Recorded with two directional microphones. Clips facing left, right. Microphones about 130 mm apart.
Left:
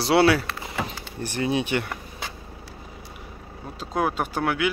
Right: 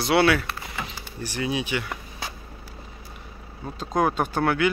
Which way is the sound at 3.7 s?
5° left (ahead or behind).